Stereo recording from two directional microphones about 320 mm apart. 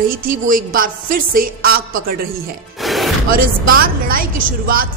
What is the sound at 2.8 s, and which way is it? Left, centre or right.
Music, centre.